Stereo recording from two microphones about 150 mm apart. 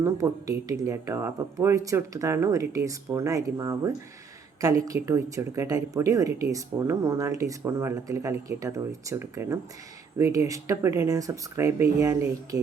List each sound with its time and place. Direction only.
0.0 s speech: 20° right (ahead or behind)